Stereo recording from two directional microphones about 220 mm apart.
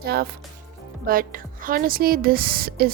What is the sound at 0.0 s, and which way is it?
Speech, 45° right (ahead or behind).